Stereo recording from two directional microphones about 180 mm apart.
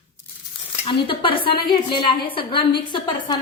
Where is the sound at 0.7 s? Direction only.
25° left (ahead or behind).